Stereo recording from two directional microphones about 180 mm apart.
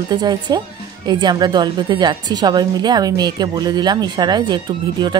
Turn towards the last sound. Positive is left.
turn(degrees=-25)  # may be behind; listen again after turning